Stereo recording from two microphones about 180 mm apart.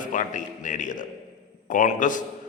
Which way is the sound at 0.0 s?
45° left (ahead or behind).